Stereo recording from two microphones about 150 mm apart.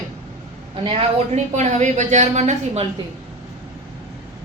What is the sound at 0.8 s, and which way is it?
A woman's voice, 50° right (ahead or behind).